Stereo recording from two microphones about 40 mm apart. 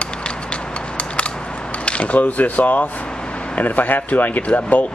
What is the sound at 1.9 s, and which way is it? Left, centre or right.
Speech, left.